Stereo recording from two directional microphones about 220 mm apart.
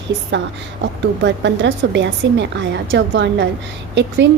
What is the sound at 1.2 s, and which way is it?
A woman's voice, 55° right (ahead or behind).